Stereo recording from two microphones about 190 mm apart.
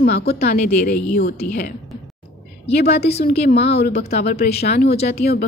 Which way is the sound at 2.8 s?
60° left (ahead or behind).